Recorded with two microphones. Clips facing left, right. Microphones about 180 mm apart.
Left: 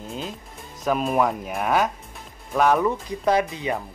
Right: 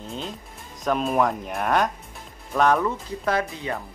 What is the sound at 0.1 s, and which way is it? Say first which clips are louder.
A man's voice: even; centre (ahead or behind).